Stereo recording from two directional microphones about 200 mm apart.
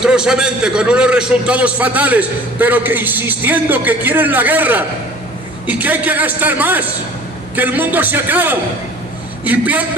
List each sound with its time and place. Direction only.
0.0 s a man's voice: 5° right (ahead or behind)